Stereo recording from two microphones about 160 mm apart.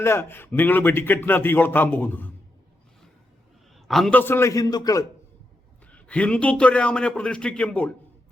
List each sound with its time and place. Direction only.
0.0 s speech: 15° left (ahead or behind)
3.8 s speech: centre (ahead or behind); by 5.0 s 25° left (ahead or behind)
5.9 s speech: 10° left (ahead or behind)